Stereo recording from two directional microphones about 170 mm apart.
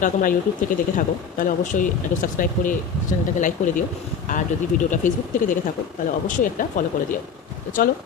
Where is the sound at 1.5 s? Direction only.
55° left (ahead or behind).